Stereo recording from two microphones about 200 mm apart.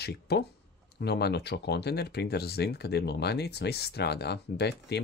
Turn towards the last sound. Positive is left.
turn(degrees=55)  # may be behind; listen again after turning